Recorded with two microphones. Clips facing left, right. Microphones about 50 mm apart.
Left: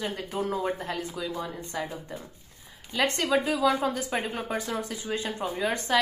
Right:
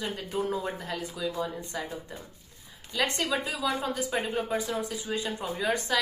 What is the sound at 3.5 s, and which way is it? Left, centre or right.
Speech, left.